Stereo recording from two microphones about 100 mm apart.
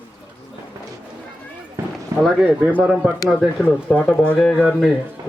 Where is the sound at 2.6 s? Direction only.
15° right (ahead or behind).